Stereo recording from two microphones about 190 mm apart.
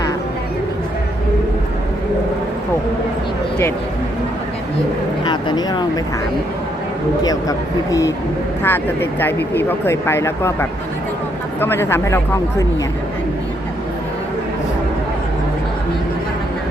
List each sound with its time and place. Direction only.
5.2 s speech: 25° left (ahead or behind)
7.3 s speech: 20° left (ahead or behind)